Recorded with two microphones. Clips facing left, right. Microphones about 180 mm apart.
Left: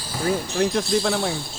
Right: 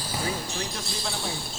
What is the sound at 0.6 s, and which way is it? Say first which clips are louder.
Speech: left 13 dB; 65° left (ahead or behind).